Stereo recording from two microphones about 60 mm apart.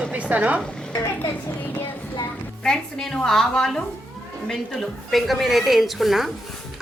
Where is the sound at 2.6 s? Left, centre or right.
Centre.